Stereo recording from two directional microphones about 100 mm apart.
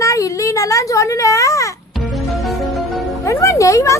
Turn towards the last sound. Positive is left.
turn(degrees=30)  # may be behind; listen again after turning